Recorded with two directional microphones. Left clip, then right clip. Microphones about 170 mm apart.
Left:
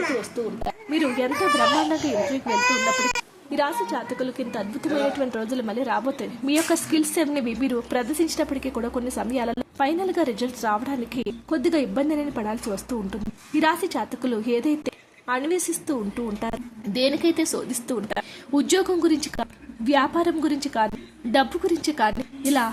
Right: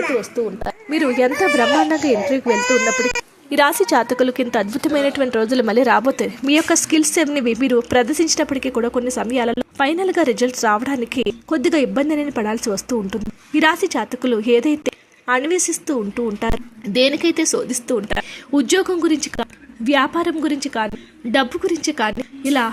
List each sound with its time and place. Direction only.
0.6 s a woman's voice: 35° right (ahead or behind)
3.8 s a woman's voice: 60° right (ahead or behind)
4.2 s a woman's voice: 40° right (ahead or behind)
5.0 s a woman's voice: 25° right (ahead or behind)
7.0 s a woman's voice: 20° right (ahead or behind)